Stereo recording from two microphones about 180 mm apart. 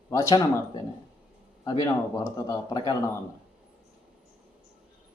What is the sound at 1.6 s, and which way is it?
A man's voice, 20° left (ahead or behind).